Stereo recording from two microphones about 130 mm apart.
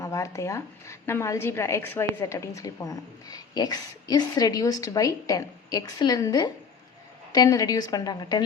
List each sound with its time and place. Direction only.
0.0 s a woman's voice: 25° left (ahead or behind)